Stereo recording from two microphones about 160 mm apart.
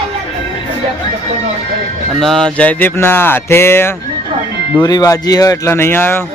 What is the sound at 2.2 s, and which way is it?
Speech, centre (ahead or behind).